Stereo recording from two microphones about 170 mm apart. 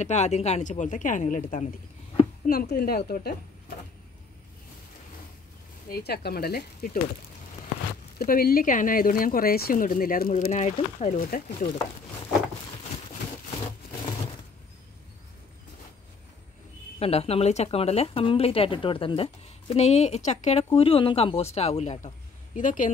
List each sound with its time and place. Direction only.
0.0 s speech: 40° left (ahead or behind); by 3.3 s 65° left (ahead or behind)
5.9 s speech: 70° left (ahead or behind)
8.2 s speech: 60° left (ahead or behind)
10.4 s a woman's voice: 40° left (ahead or behind)
11.2 s speech: 55° left (ahead or behind)
17.0 s a woman's voice: 35° left (ahead or behind)